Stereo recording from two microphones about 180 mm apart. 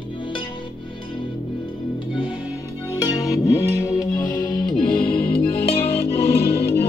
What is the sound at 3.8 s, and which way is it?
Music, 15° left (ahead or behind).